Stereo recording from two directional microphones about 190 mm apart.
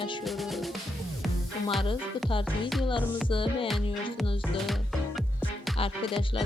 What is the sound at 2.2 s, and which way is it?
A woman's voice, 25° left (ahead or behind).